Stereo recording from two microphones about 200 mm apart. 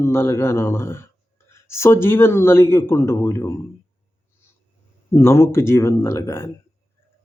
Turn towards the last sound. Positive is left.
turn(degrees=15)  # may be behind; listen again after turning